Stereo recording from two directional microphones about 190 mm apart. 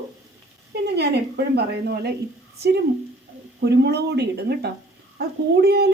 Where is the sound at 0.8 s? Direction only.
60° right (ahead or behind).